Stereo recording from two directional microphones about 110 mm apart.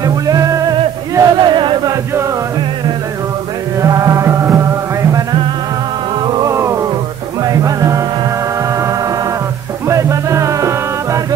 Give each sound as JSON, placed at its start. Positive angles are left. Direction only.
{"t": 0.0, "sound": "music", "side_deg": -30}
{"t": 1.1, "sound": "chant", "side_deg": -35}
{"t": 3.8, "sound": "music", "side_deg": -30}
{"t": 6.2, "sound": "music", "side_deg": -40}
{"t": 6.5, "sound": "music", "side_deg": -25}
{"t": 9.8, "sound": "music", "side_deg": -25}